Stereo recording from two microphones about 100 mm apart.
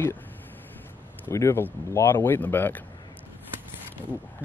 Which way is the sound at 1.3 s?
30° left (ahead or behind).